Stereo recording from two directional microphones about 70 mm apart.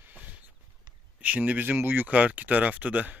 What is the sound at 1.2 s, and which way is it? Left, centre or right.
Speech, right.